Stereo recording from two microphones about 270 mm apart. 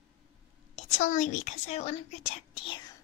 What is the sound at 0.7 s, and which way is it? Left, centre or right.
A woman's voice, left.